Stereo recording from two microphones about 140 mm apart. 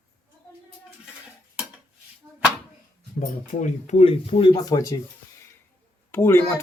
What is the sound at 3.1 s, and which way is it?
Speech, 65° left (ahead or behind).